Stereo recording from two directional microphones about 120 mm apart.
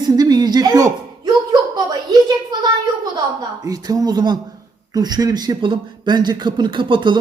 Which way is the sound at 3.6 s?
30° right (ahead or behind).